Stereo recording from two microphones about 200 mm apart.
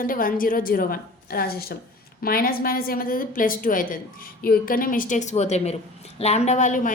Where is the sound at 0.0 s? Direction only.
45° left (ahead or behind).